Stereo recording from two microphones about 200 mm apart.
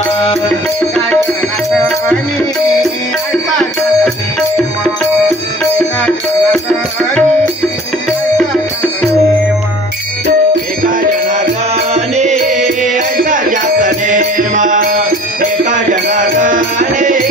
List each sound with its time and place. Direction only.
6.0 s music: 5° left (ahead or behind)
10.9 s music: 40° right (ahead or behind)